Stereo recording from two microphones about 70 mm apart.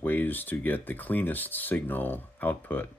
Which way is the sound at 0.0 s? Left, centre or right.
Left.